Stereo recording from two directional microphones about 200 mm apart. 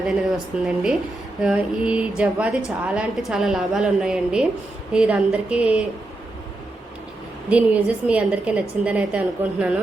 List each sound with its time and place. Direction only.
0.6 s a woman's voice: 5° right (ahead or behind)
7.5 s a woman's voice: 5° right (ahead or behind)